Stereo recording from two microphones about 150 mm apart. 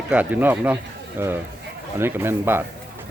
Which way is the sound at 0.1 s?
10° right (ahead or behind).